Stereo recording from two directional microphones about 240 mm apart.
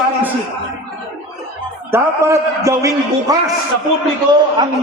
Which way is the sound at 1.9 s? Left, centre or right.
Centre.